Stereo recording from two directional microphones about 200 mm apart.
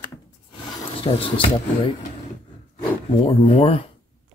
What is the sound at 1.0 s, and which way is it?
Speech, 30° left (ahead or behind).